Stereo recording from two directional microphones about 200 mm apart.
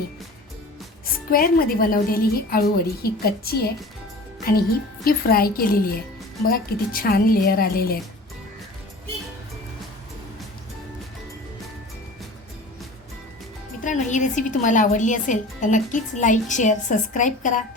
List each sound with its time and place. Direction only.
1.3 s a woman's voice: 45° left (ahead or behind)
5.0 s a woman's voice: 50° left (ahead or behind)
13.8 s a woman's voice: 40° left (ahead or behind)